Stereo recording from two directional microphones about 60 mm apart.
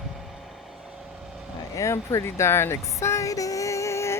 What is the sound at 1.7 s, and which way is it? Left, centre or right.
Speech, left.